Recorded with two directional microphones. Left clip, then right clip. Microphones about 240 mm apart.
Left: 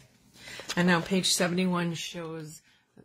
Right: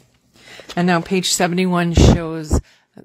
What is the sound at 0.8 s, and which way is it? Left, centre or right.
A woman's voice, right.